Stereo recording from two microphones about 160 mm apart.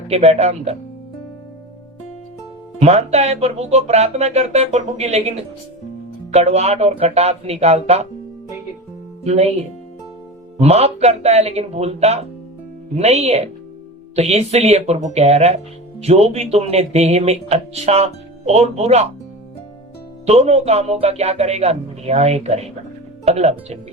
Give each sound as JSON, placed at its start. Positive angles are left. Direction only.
{"t": 0.1, "sound": "speech", "side_deg": -40}
{"t": 2.8, "sound": "speech", "side_deg": -40}
{"t": 6.3, "sound": "speech", "side_deg": -40}
{"t": 9.2, "sound": "speech", "side_deg": -40}
{"t": 10.6, "sound": "speech", "side_deg": -40}
{"t": 20.2, "sound": "speech", "side_deg": -40}